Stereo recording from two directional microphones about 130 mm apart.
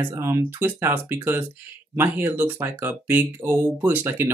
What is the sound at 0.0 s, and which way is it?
Speech, 20° right (ahead or behind).